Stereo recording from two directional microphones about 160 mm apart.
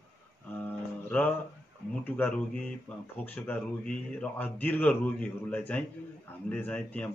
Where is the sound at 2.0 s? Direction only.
10° left (ahead or behind).